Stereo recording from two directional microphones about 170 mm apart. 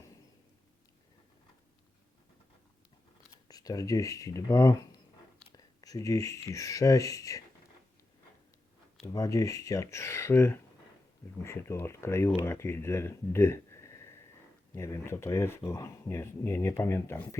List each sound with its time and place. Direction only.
3.5 s speech: 20° left (ahead or behind)
5.8 s speech: 20° left (ahead or behind)
9.0 s speech: 20° left (ahead or behind)